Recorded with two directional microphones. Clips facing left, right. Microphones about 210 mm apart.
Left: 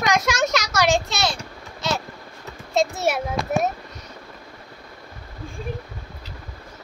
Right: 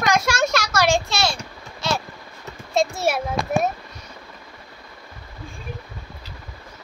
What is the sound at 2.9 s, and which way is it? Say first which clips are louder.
Speech: even; 20° left (ahead or behind).